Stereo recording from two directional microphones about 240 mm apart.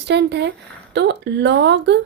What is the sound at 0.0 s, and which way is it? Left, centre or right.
A woman's voice, right.